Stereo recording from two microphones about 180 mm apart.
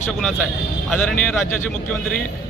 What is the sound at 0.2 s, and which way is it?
Speech, centre (ahead or behind).